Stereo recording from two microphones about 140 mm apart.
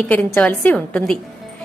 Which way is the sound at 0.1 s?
10° left (ahead or behind).